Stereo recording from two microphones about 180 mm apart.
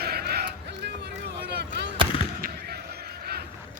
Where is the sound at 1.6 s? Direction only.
65° right (ahead or behind).